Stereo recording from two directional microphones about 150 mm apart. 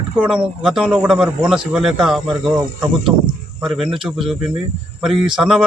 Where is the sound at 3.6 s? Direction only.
Centre (ahead or behind).